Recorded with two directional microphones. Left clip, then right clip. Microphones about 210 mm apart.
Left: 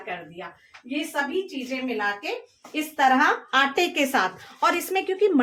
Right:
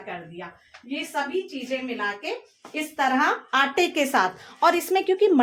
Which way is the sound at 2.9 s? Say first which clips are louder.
Left 3 dB; 15° right (ahead or behind).